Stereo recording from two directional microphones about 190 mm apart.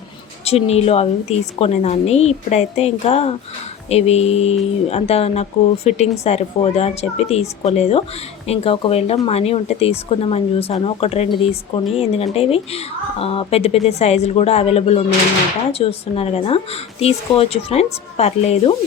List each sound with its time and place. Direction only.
0.4 s speech: 35° left (ahead or behind)